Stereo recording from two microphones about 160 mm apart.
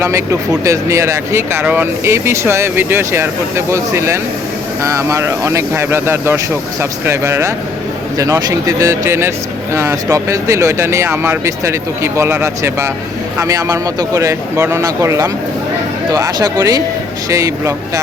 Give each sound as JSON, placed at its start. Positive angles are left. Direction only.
{"t": 0.6, "sound": "speech", "side_deg": -20}